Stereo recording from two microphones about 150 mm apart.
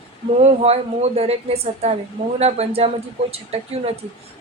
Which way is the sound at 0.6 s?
45° right (ahead or behind).